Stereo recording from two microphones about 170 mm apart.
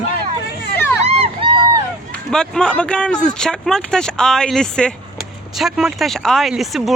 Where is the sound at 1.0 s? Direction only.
35° right (ahead or behind).